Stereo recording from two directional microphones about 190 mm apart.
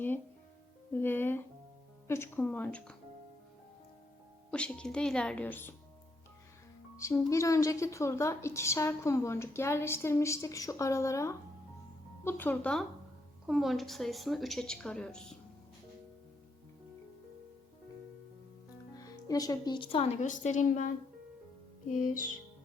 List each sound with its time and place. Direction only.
0.9 s a woman's voice: 10° left (ahead or behind)
4.5 s a woman's voice: 5° left (ahead or behind)
6.9 s a woman's voice: 15° left (ahead or behind)
18.9 s speech: 20° left (ahead or behind); by 20.9 s 40° left (ahead or behind)